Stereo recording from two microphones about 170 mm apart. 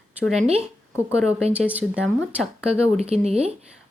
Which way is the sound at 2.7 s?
40° right (ahead or behind).